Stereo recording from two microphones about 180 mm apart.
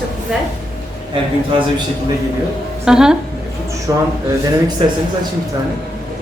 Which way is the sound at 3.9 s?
20° right (ahead or behind).